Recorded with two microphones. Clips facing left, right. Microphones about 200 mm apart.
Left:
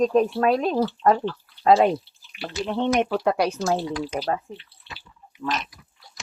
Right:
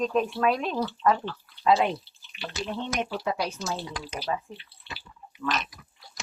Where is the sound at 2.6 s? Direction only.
60° left (ahead or behind).